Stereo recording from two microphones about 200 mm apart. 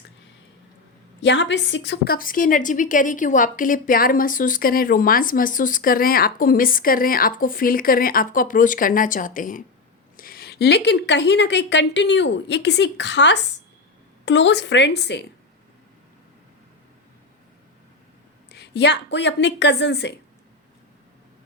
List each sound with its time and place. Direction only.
1.2 s a woman's voice: 65° left (ahead or behind)
18.5 s speech: 60° left (ahead or behind)